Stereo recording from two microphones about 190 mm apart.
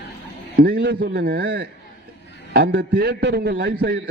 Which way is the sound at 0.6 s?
50° right (ahead or behind).